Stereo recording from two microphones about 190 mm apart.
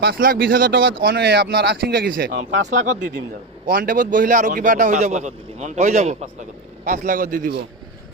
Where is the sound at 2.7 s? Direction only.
40° right (ahead or behind).